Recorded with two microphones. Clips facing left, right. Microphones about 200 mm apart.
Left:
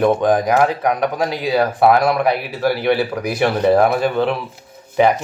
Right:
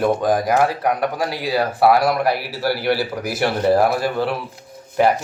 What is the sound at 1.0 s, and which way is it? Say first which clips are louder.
Speech: left 3 dB; 5° right (ahead or behind).